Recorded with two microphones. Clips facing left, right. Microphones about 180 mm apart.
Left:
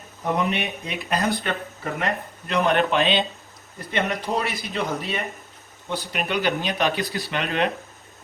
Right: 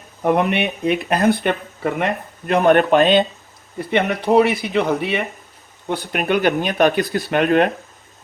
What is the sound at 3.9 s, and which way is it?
Speech, 60° right (ahead or behind).